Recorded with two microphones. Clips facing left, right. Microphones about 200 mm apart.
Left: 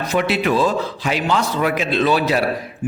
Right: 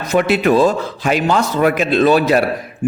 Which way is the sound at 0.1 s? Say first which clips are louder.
Right 6 dB; 50° right (ahead or behind).